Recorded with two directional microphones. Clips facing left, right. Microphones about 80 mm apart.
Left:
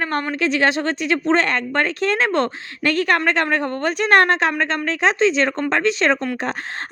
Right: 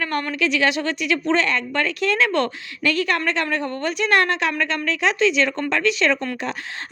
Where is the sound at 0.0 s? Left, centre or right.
Left.